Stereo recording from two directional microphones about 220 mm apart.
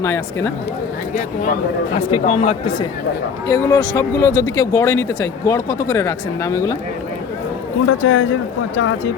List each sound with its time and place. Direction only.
0.0 s speech: 10° left (ahead or behind)
2.2 s speech: 35° left (ahead or behind)
3.4 s speech: 15° left (ahead or behind)
7.9 s a man's voice: 60° left (ahead or behind)